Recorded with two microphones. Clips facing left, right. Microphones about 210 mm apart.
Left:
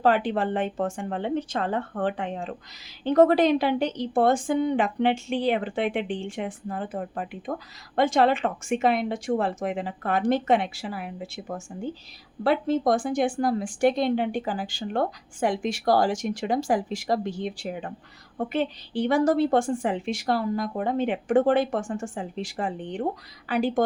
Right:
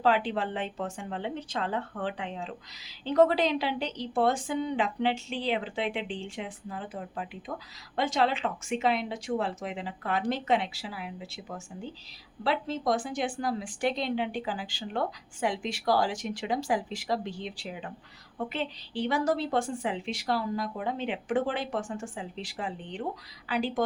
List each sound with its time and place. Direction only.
0.0 s speech: 50° left (ahead or behind)